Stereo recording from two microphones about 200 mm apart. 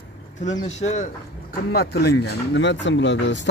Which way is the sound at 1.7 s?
50° left (ahead or behind).